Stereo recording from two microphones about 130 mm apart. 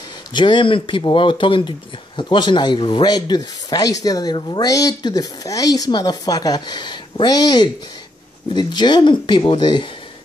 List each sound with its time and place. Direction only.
0.3 s speech: 35° left (ahead or behind)